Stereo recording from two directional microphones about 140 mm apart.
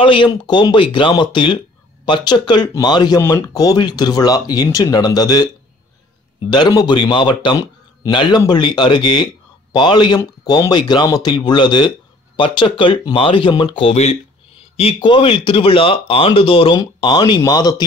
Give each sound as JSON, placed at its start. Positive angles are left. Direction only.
{"t": 0.0, "sound": "speech", "side_deg": 35}
{"t": 6.5, "sound": "speech", "side_deg": 30}